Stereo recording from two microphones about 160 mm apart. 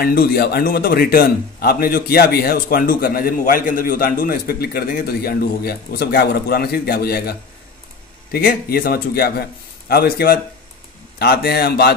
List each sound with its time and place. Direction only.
0.0 s a man's voice: 70° left (ahead or behind)
11.1 s speech: 90° left